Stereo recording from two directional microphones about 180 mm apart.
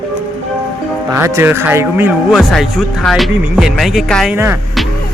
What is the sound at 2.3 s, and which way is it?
Speech, centre (ahead or behind).